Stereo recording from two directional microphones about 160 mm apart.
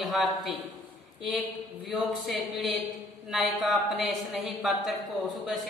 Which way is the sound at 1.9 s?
Centre (ahead or behind).